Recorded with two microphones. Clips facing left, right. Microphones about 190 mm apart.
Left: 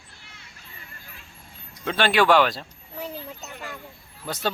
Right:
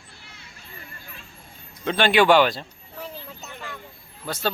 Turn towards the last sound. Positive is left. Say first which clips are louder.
# right 1 dB
turn(degrees=15)  # may be behind; listen again after turning